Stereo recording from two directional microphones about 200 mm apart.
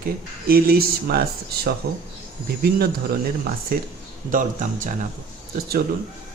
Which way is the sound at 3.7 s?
45° right (ahead or behind).